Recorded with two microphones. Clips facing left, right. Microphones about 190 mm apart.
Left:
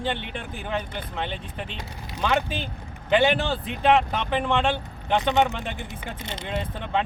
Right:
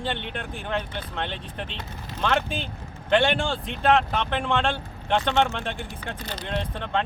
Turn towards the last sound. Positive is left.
turn(degrees=5)  # may be behind; listen again after turning